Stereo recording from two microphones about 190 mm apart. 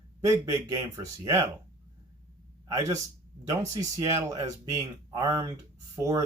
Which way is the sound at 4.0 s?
20° right (ahead or behind).